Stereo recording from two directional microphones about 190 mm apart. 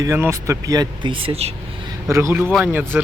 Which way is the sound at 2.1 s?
15° right (ahead or behind).